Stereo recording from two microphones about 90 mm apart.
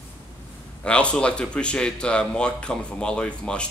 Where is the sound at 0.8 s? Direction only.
10° left (ahead or behind).